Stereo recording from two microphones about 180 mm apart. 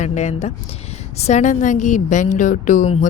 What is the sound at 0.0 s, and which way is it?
A woman's voice, 40° left (ahead or behind).